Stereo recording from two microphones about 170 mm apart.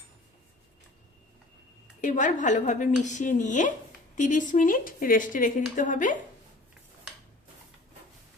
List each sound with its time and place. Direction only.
2.0 s a woman's voice: 50° left (ahead or behind)